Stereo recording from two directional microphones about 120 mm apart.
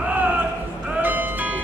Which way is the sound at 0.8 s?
10° right (ahead or behind).